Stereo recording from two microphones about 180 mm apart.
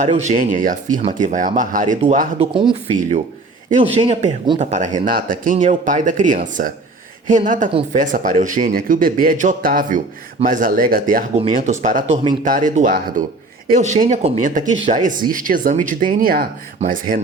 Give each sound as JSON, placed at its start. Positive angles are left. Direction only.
{"t": 0.0, "sound": "a man's voice", "side_deg": -40}
{"t": 2.5, "sound": "speech", "side_deg": -30}
{"t": 4.0, "sound": "a man's voice", "side_deg": -40}